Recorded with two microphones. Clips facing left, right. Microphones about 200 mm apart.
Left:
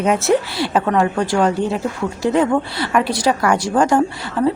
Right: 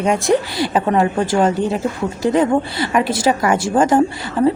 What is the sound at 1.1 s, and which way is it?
Speech, 25° right (ahead or behind).